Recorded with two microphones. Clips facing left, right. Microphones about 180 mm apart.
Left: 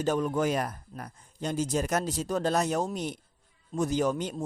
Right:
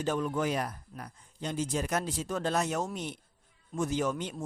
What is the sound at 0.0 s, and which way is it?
A man's voice, 40° left (ahead or behind).